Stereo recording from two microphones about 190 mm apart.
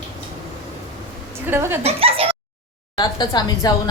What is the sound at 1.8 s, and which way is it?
Speech, 30° right (ahead or behind).